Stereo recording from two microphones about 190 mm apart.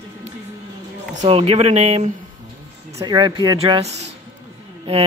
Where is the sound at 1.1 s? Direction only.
35° right (ahead or behind).